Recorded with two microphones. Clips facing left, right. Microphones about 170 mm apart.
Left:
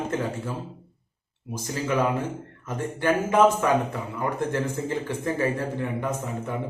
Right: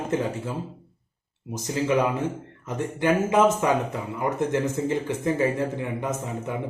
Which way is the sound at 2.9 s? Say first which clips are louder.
Even; 15° right (ahead or behind).